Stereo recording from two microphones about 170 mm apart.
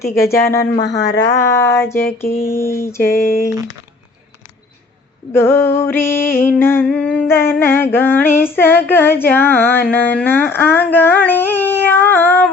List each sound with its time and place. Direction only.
0.0 s a sound: 60° left (ahead or behind)
0.5 s female singing: 15° left (ahead or behind)
0.9 s speech: 80° left
1.5 s female singing: 15° left (ahead or behind)
3.1 s a sound: 55° left (ahead or behind)
5.3 s female singing: 15° left (ahead or behind)